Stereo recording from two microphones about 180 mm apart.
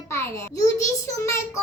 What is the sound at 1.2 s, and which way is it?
Speech, 15° left (ahead or behind).